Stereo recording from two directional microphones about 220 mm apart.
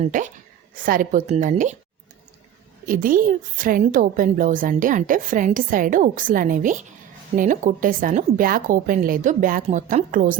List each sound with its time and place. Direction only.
0.0 s a woman's voice: 35° right (ahead or behind)
2.8 s a woman's voice: 40° right (ahead or behind)